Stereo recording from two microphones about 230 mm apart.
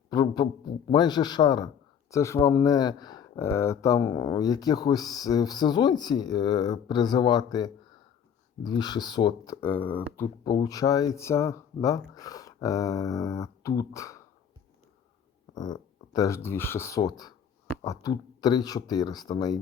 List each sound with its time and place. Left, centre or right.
0.1 s a man's voice: centre
15.5 s a man's voice: centre